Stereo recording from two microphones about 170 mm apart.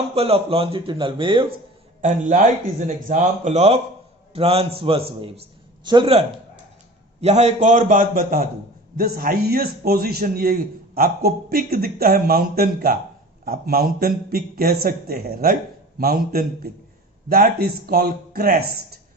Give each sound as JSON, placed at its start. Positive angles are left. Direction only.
{"t": 0.1, "sound": "speech", "side_deg": -35}
{"t": 2.0, "sound": "a man's voice", "side_deg": -45}